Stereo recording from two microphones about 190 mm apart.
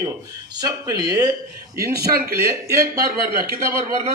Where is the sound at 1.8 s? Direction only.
55° right (ahead or behind).